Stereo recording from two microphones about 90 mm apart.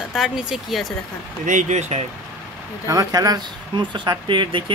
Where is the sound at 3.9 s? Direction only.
60° right (ahead or behind).